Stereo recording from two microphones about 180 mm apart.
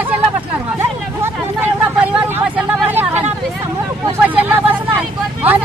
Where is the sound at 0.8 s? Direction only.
10° right (ahead or behind).